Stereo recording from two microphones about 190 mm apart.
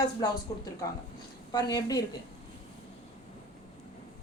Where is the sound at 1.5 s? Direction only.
20° left (ahead or behind).